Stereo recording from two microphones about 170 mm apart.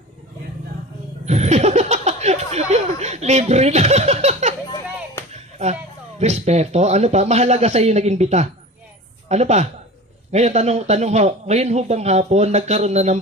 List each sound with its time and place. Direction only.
1.2 s a sound: 40° right (ahead or behind)
5.3 s music: 40° right (ahead or behind)
6.1 s a man's voice: 40° right (ahead or behind)